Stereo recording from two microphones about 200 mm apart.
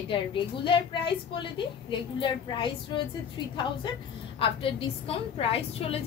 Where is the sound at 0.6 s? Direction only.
25° left (ahead or behind).